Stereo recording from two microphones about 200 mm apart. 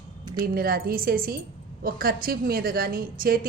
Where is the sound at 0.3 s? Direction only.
45° right (ahead or behind).